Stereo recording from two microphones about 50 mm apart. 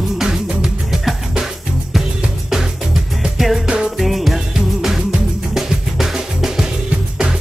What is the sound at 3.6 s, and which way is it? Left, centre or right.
Music, centre.